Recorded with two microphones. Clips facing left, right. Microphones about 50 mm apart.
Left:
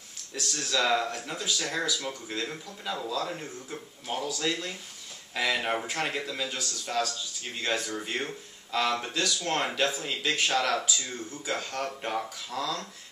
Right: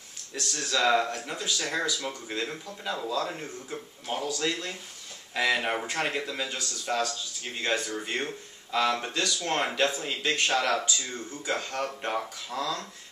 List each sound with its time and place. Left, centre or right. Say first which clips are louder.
0.3 s speech: right 1 dB; centre